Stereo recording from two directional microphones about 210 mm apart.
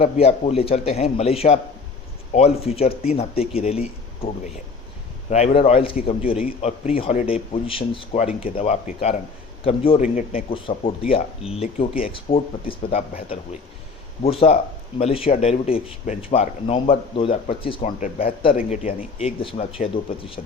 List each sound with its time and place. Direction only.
0.0 s speech: 30° left (ahead or behind)
5.3 s speech: 30° left (ahead or behind)
17.8 s speech: 40° left (ahead or behind)